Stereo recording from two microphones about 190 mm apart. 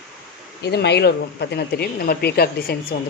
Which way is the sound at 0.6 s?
60° left (ahead or behind).